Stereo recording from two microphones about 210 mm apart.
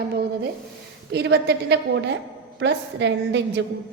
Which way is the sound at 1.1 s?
50° right (ahead or behind).